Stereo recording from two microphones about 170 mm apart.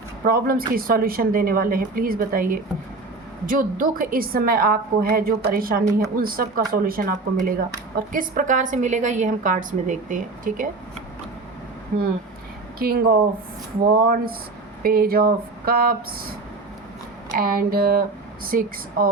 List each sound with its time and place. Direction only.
0.3 s a woman's voice: 60° right (ahead or behind)
11.9 s a woman's voice: 60° right (ahead or behind)
17.2 s a woman's voice: 60° right (ahead or behind)